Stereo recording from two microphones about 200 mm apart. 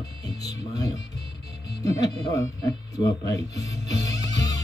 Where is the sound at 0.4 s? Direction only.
20° left (ahead or behind).